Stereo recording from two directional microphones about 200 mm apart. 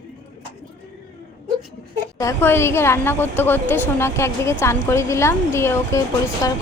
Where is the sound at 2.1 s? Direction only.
15° left (ahead or behind).